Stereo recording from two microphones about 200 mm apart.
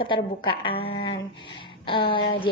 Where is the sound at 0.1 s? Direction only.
25° left (ahead or behind).